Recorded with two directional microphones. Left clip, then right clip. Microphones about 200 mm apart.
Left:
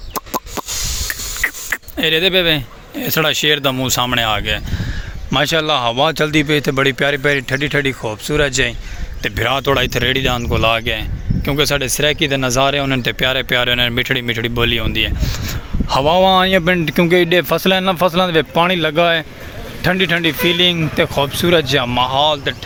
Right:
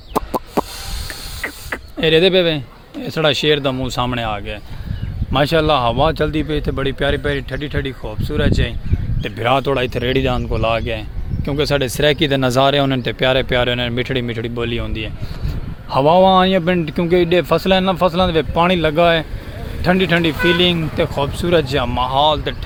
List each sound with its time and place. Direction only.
0.2 s a sound: 10° left (ahead or behind)
1.4 s speech: 10° left (ahead or behind)
9.2 s speech: 5° left (ahead or behind)
11.8 s speech: 15° right (ahead or behind)
13.0 s speech: centre (ahead or behind)